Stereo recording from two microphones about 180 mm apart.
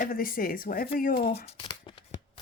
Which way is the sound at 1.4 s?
30° left (ahead or behind).